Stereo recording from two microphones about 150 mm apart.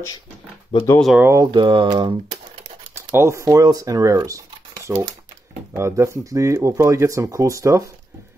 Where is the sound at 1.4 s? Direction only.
30° right (ahead or behind).